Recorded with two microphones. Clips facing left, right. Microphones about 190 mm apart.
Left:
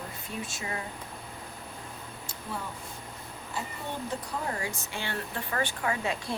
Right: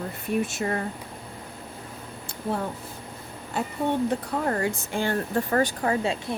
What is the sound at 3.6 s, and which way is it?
Speech, 60° right (ahead or behind).